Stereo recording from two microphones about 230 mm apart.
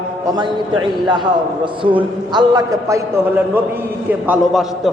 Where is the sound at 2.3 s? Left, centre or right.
Centre.